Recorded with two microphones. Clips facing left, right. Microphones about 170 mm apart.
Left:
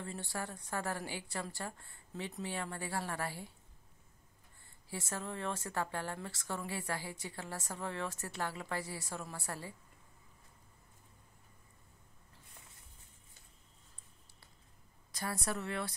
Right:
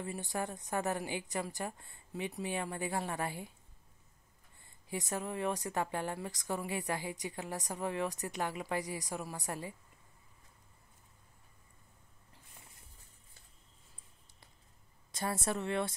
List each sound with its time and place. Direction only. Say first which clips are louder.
0.0 s a woman's voice: right 4 dB; 15° right (ahead or behind)
4.8 s a woman's voice: right 4 dB; 15° right (ahead or behind)
15.1 s a woman's voice: right 3 dB; 25° right (ahead or behind)